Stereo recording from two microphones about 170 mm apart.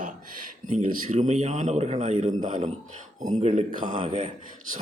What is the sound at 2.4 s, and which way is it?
Speech, 50° right (ahead or behind).